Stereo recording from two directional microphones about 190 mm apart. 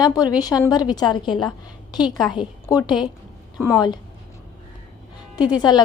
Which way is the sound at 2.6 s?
20° left (ahead or behind).